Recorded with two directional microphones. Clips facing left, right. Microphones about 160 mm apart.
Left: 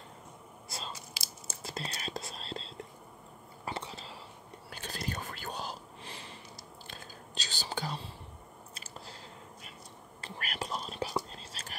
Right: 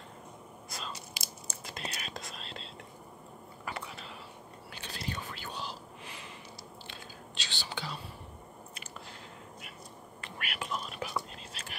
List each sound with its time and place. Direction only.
0.7 s biting: 30° left (ahead or behind)
1.6 s whispering: 30° left (ahead or behind)
3.6 s a sound: 25° left (ahead or behind)
4.6 s whispering: 45° left (ahead or behind)
8.7 s chewing: 35° left (ahead or behind)
10.2 s whispering: 35° left (ahead or behind)